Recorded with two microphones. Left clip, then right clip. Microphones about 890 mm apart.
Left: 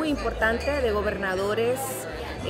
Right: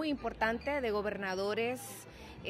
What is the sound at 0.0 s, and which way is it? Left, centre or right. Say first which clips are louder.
A woman's voice: left 9 dB; right.